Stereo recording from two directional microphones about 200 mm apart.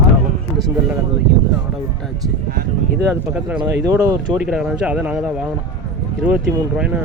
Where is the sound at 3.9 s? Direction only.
10° right (ahead or behind).